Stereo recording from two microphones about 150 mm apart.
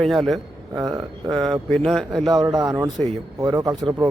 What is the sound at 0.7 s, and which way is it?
Speech, 25° right (ahead or behind).